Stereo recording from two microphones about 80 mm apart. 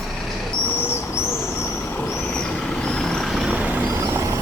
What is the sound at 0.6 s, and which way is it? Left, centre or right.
Owl, left.